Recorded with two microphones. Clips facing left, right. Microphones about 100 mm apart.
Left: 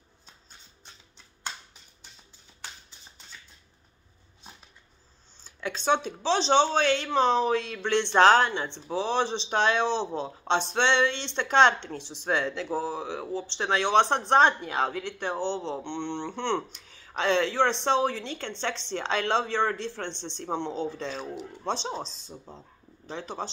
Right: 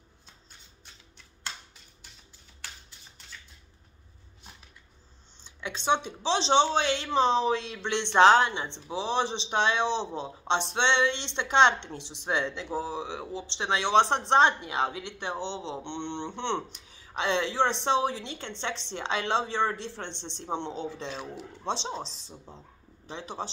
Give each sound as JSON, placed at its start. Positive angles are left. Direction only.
{"t": 5.9, "sound": "speech", "side_deg": -20}
{"t": 12.0, "sound": "speech", "side_deg": -65}
{"t": 12.4, "sound": "a woman's voice", "side_deg": -20}
{"t": 23.0, "sound": "speech", "side_deg": -20}